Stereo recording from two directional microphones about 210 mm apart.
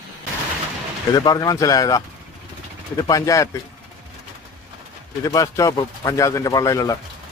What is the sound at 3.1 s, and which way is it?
Speech, 15° left (ahead or behind).